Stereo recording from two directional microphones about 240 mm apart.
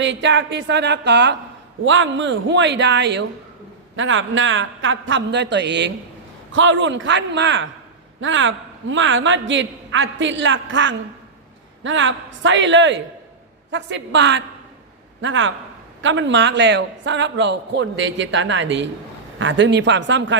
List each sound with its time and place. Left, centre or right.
0.0 s a man's voice: right